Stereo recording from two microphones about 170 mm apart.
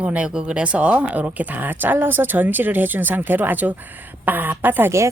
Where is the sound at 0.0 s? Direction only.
5° right (ahead or behind).